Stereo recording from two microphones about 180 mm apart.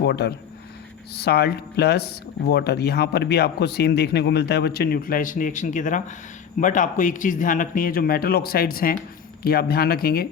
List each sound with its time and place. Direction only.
0.0 s speech: 65° left (ahead or behind)